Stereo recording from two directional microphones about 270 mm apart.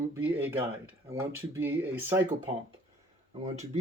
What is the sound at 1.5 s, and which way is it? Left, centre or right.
Speech, centre.